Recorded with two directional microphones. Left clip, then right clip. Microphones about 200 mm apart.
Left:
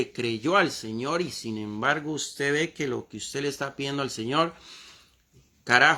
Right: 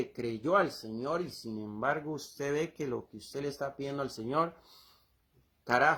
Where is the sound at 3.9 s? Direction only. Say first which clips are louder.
Left 6 dB; 35° left (ahead or behind).